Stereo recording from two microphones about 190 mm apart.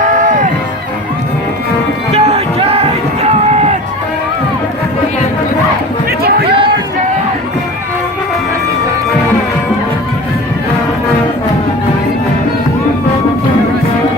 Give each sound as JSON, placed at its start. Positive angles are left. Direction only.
{"t": 2.1, "sound": "music", "side_deg": -30}
{"t": 6.1, "sound": "music", "side_deg": -55}